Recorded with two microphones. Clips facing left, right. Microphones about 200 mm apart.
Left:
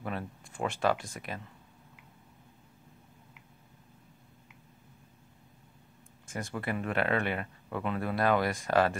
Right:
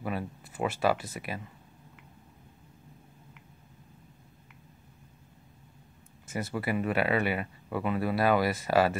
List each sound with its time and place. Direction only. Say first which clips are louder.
0.0 s speech: right 3 dB; 5° right (ahead or behind)
6.2 s speech: right 3 dB; 5° right (ahead or behind)